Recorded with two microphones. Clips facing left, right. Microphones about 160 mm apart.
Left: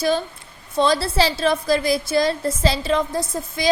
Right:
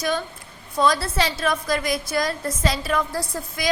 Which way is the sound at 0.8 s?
30° left (ahead or behind).